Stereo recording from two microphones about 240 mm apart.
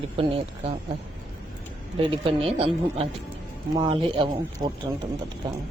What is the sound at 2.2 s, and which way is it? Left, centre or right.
Speech, right.